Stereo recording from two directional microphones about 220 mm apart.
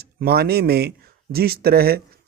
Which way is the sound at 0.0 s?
45° right (ahead or behind).